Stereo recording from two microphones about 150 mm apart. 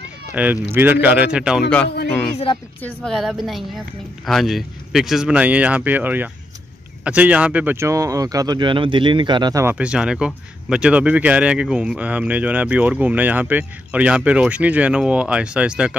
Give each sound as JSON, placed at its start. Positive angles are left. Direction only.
{"t": 0.3, "sound": "a man's voice", "side_deg": -10}
{"t": 2.3, "sound": "a woman's voice", "side_deg": 35}
{"t": 2.8, "sound": "a man's voice", "side_deg": 5}
{"t": 9.8, "sound": "a man's voice", "side_deg": -5}